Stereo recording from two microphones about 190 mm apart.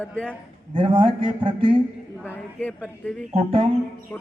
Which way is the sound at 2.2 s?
10° left (ahead or behind).